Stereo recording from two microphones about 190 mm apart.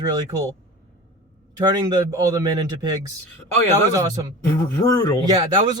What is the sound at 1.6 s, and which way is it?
Speech, 20° right (ahead or behind).